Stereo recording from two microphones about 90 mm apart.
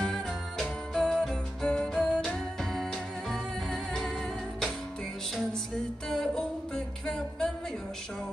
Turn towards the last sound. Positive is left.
turn(degrees=5)  # may be behind; listen again after turning